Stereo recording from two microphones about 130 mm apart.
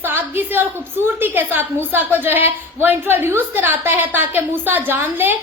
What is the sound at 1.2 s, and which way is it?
A woman's voice, 15° right (ahead or behind).